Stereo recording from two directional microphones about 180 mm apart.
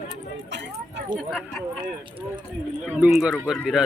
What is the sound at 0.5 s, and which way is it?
Speech, 75° right (ahead or behind).